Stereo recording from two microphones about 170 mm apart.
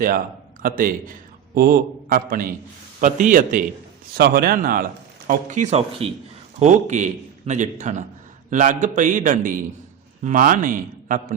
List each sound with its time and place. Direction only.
0.6 s a man's voice: 55° right (ahead or behind)
4.1 s a man's voice: 65° right (ahead or behind)
5.3 s a man's voice: 45° right (ahead or behind)